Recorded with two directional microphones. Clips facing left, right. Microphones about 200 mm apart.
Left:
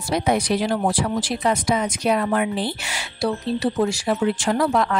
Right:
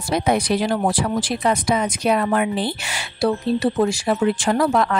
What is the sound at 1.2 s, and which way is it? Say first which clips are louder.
Speech: right 1 dB; 60° right (ahead or behind).